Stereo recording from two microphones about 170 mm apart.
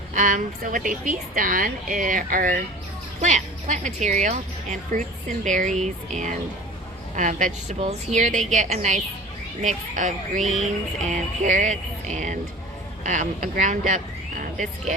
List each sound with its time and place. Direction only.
0.1 s a woman's voice: 50° right (ahead or behind)
10.4 s a sound: centre (ahead or behind)
11.1 s a woman's voice: 45° right (ahead or behind)